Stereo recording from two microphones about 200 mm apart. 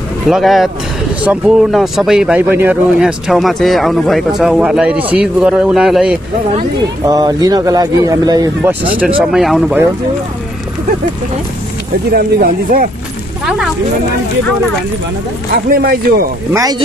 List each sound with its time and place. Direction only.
0.3 s speech: centre (ahead or behind)
7.1 s speech: 20° right (ahead or behind); by 9.8 s 5° right (ahead or behind)
12.1 s speech: 50° right (ahead or behind)
15.5 s speech: 50° right (ahead or behind)
16.5 s speech: 20° right (ahead or behind)